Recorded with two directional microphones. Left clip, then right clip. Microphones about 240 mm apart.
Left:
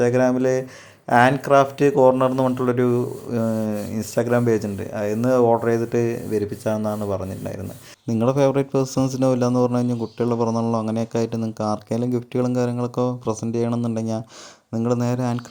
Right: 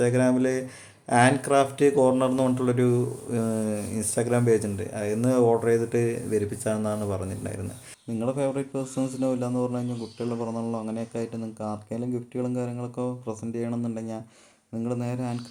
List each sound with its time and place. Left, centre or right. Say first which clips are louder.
0.0 s speech: left 5 dB; centre
8.0 s speech: left 9 dB; left